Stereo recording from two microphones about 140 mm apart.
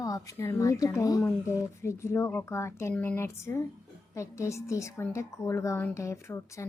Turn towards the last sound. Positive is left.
turn(degrees=20)  # may be behind; listen again after turning